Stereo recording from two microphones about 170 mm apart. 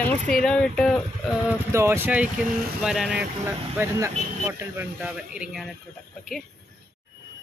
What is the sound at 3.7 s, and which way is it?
Speech, 15° right (ahead or behind).